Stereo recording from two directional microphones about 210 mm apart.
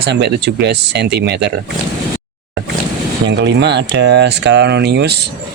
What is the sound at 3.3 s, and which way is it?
Speech, 55° right (ahead or behind).